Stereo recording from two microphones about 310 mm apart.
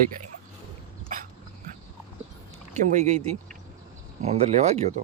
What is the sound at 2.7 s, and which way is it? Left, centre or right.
Speech, right.